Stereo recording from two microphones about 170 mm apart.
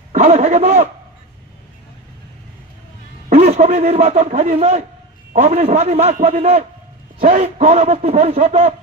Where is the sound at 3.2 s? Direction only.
40° right (ahead or behind).